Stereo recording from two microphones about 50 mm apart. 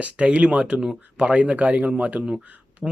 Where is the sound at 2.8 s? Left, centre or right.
Centre.